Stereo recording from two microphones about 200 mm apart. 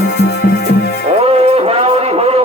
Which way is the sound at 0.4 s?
55° left (ahead or behind).